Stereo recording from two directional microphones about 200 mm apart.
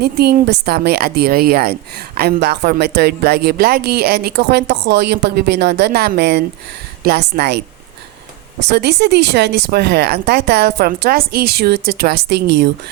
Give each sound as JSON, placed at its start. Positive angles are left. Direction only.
{"t": 0.0, "sound": "a woman's voice", "side_deg": -55}
{"t": 8.7, "sound": "speech", "side_deg": -55}